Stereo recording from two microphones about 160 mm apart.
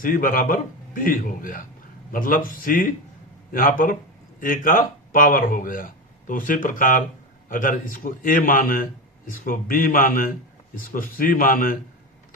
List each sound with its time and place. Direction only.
0.0 s a man's voice: 60° left (ahead or behind)